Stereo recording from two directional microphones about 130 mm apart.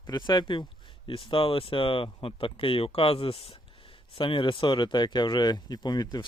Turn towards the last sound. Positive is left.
turn(degrees=30)  # may be behind; listen again after turning